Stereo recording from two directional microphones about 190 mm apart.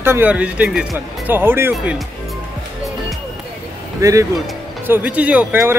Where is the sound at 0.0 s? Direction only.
10° right (ahead or behind).